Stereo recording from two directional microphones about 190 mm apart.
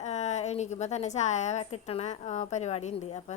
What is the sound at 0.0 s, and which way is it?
A woman's voice, 35° left (ahead or behind).